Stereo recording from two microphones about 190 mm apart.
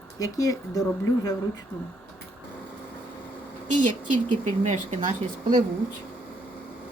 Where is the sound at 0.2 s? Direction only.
20° left (ahead or behind).